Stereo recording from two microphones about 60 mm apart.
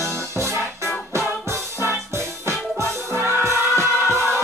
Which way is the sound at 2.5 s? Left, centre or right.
Right.